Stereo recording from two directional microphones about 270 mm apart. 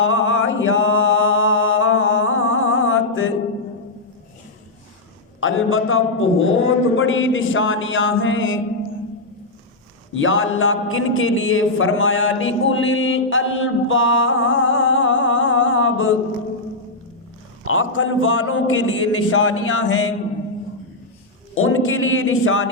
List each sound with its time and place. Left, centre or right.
0.0 s mantra: left
5.4 s a man's voice: left
10.2 s speech: left
17.7 s a man's voice: left
21.5 s a man's voice: left